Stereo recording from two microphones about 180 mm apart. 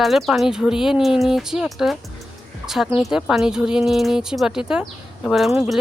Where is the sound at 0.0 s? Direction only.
Centre (ahead or behind).